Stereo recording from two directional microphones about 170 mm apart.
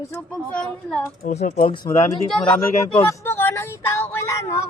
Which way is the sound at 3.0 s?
15° left (ahead or behind).